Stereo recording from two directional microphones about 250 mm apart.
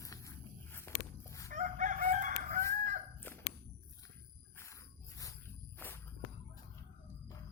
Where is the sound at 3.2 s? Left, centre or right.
Centre.